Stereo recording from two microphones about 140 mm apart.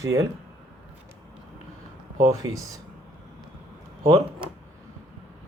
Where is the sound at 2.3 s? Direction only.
25° right (ahead or behind).